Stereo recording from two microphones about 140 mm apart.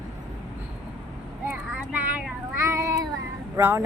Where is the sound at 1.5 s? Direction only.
15° right (ahead or behind).